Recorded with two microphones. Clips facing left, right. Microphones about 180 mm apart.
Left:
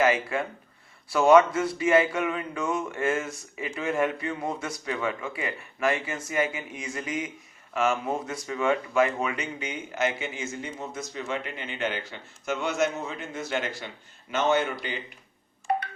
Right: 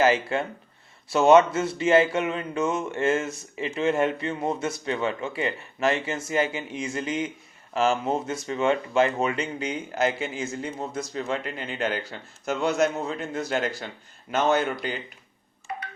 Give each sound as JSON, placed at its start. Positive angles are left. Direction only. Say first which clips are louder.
{"t": 0.0, "sound": "speech", "louder": "right 2 dB", "side_deg": -30}